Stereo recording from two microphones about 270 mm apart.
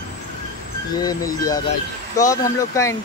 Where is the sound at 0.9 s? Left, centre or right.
Centre.